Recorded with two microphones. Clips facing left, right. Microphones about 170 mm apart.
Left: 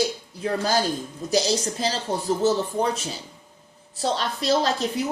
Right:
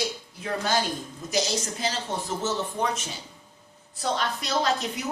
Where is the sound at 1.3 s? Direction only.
35° left (ahead or behind).